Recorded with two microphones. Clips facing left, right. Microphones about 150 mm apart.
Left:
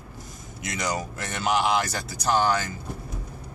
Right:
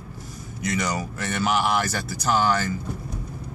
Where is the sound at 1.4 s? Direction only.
15° left (ahead or behind).